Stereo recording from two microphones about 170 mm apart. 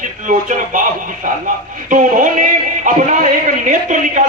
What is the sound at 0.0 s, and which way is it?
Speech, 50° right (ahead or behind).